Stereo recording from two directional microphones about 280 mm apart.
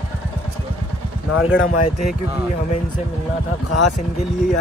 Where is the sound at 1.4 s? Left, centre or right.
Left.